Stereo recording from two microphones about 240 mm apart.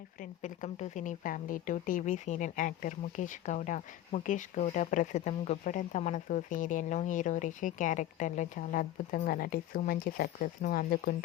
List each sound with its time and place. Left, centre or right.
0.2 s a woman's voice: left